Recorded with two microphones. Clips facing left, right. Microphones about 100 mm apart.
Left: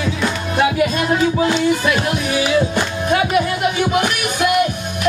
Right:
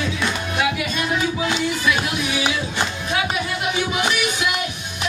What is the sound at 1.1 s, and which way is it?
Music, 40° left (ahead or behind).